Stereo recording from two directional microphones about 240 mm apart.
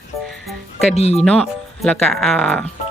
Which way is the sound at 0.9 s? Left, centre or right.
Left.